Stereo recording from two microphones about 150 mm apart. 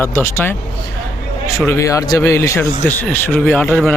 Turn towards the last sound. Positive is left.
turn(degrees=10)  # may be behind; listen again after turning